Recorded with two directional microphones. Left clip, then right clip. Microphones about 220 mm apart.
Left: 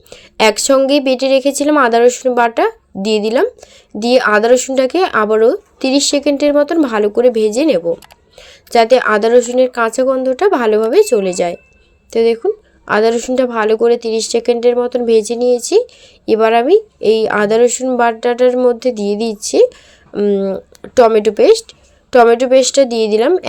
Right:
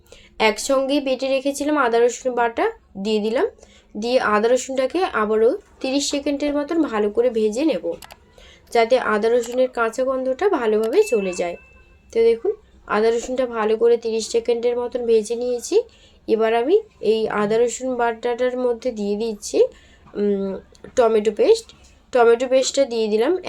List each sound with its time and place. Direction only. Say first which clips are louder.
0.1 s a woman's voice: left 7 dB; 40° left (ahead or behind)